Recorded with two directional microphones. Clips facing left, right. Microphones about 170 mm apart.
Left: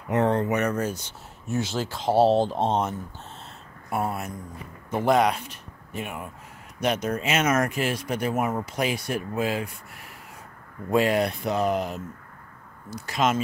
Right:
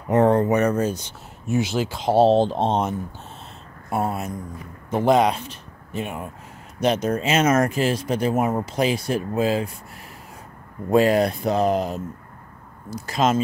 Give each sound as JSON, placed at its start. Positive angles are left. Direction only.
{"t": 0.1, "sound": "speech", "side_deg": -40}
{"t": 10.9, "sound": "speech", "side_deg": -35}
{"t": 13.0, "sound": "speech", "side_deg": -35}